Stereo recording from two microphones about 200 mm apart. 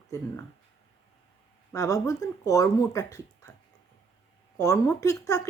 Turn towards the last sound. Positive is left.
turn(degrees=15)  # may be behind; listen again after turning